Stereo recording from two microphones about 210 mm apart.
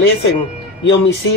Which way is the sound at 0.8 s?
60° left (ahead or behind).